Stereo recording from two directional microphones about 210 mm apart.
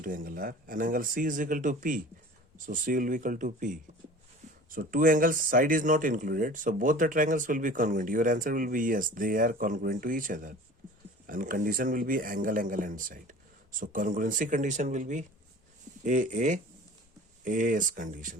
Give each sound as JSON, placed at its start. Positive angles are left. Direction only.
{"t": 0.0, "sound": "speech", "side_deg": -40}